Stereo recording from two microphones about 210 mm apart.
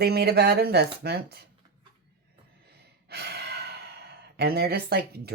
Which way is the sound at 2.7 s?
50° right (ahead or behind).